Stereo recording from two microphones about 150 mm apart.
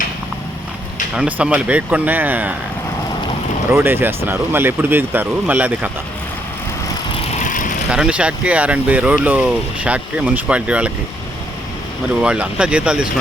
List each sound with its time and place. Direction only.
1.1 s speech: 5° right (ahead or behind)
3.7 s speech: 15° right (ahead or behind)
7.3 s vehicle: 60° left (ahead or behind)
7.9 s speech: 5° right (ahead or behind)
12.2 s speech: 5° right (ahead or behind)